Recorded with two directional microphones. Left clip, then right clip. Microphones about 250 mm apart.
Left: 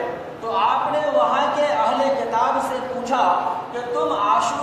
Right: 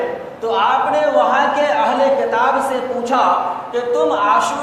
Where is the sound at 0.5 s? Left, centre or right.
Right.